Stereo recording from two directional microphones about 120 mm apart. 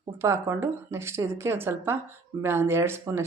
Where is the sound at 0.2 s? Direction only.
20° right (ahead or behind).